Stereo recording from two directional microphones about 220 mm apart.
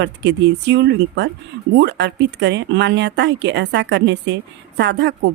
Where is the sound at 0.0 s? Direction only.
55° right (ahead or behind).